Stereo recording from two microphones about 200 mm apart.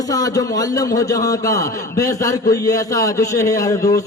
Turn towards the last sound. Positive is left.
turn(degrees=15)  # may be behind; listen again after turning